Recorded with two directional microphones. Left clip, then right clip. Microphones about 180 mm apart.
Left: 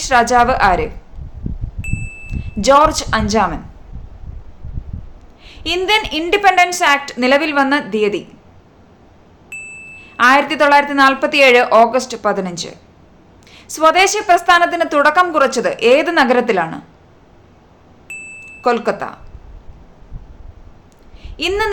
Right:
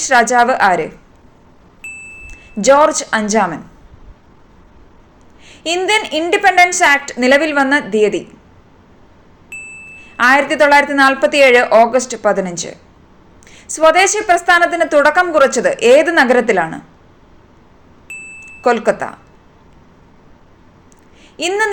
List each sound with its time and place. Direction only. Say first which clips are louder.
0.0 s a woman's voice: right 1 dB; centre (ahead or behind)
1.8 s wind chime: even; 5° right (ahead or behind)
5.5 s a woman's voice: even; centre (ahead or behind)
9.5 s ding: even; centre (ahead or behind)
10.0 s a woman's voice: even; centre (ahead or behind)
18.1 s wind chime: even; 5° right (ahead or behind)
21.3 s a woman's voice: right 2 dB; centre (ahead or behind)